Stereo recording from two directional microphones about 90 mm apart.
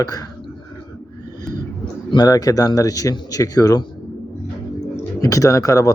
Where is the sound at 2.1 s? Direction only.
50° left (ahead or behind).